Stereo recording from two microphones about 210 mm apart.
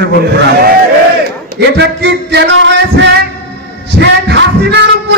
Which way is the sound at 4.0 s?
55° right (ahead or behind).